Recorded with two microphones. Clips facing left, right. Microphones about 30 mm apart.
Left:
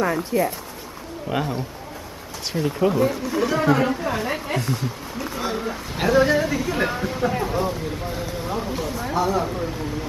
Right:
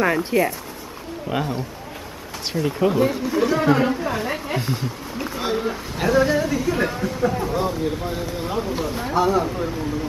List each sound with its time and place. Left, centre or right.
0.0 s speech: right
1.3 s speech: centre
2.6 s speech: centre
4.6 s a man's voice: centre
5.1 s a sound: centre
5.4 s a man's voice: centre
5.9 s speech: centre
8.5 s speech: centre